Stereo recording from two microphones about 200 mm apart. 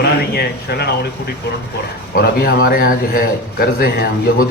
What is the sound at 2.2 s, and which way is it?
A man's voice, 50° left (ahead or behind).